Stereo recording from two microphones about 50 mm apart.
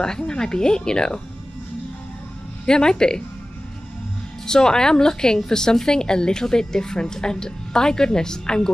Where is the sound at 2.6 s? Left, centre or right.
Centre.